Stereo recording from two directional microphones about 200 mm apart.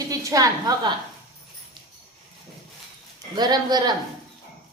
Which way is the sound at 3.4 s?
20° right (ahead or behind).